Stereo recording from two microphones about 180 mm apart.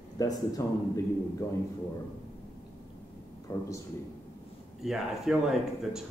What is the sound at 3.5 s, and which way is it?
Speech, 15° left (ahead or behind).